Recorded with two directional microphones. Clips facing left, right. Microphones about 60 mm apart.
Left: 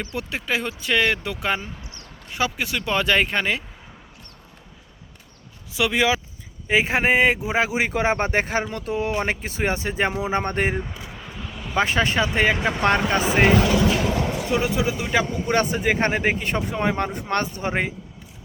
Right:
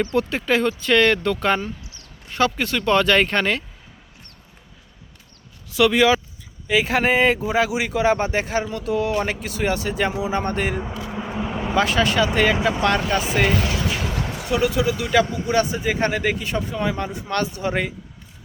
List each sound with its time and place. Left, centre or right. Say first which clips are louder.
0.0 s speech: right 8 dB; centre
5.7 s speech: right 5 dB; centre
6.7 s speech: even; left
7.5 s speech: right 1 dB; left
11.1 s vehicle: right 9 dB; right
11.5 s vehicle: right 6 dB; right
11.8 s speech: right 1 dB; left
14.5 s speech: right 4 dB; left
15.4 s speech: even; left
17.3 s speech: right 1 dB; left